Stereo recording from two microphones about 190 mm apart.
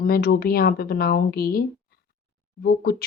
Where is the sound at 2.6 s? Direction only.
55° left (ahead or behind).